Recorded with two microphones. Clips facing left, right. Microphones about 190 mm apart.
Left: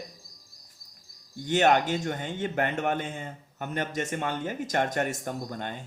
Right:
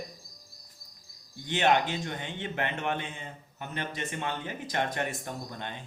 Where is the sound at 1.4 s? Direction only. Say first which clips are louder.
Left 3 dB; 45° left (ahead or behind).